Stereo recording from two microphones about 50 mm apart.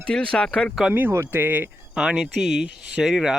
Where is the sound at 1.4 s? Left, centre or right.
Right.